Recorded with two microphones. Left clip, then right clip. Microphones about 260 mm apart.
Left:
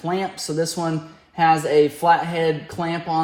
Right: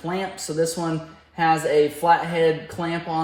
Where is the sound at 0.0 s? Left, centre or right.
Centre.